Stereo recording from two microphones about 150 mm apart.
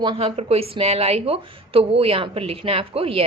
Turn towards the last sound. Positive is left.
turn(degrees=-40)  # may be behind; listen again after turning